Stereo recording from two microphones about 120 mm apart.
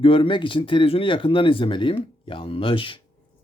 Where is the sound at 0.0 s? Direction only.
50° left (ahead or behind).